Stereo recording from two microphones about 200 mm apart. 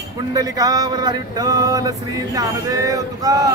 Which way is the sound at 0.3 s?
20° right (ahead or behind).